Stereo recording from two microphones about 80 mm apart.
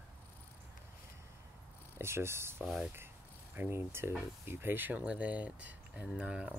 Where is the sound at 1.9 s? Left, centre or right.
Right.